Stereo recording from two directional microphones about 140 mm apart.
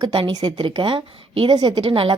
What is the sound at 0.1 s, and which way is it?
Speech, 40° right (ahead or behind).